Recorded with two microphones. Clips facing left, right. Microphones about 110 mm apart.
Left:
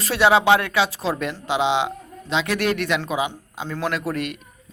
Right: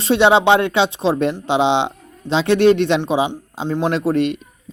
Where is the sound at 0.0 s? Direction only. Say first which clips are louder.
Right 4 dB; 25° right (ahead or behind).